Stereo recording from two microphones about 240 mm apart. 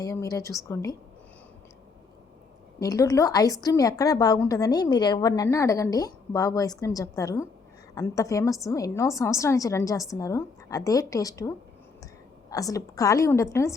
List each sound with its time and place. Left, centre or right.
0.0 s a woman's voice: centre
2.8 s a woman's voice: centre